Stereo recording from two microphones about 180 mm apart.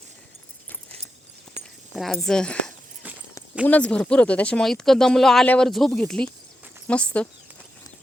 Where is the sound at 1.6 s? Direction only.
35° right (ahead or behind).